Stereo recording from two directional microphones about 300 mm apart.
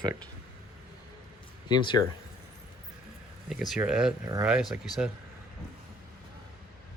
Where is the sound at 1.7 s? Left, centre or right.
Centre.